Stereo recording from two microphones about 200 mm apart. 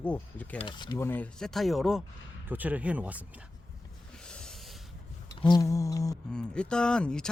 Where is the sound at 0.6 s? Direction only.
20° left (ahead or behind).